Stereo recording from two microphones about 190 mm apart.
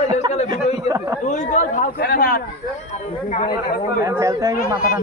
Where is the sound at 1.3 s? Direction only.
40° left (ahead or behind).